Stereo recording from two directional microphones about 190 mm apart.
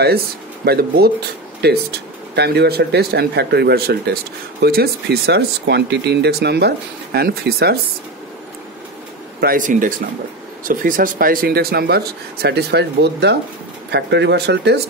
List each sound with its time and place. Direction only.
0.7 s speech: 55° right (ahead or behind)
9.4 s speech: 45° right (ahead or behind); by 14.8 s 60° right (ahead or behind)